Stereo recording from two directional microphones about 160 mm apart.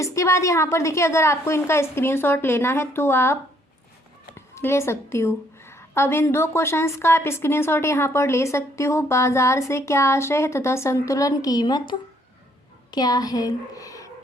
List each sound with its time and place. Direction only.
0.0 s a woman's voice: 20° left (ahead or behind)
4.4 s a woman's voice: 15° left (ahead or behind)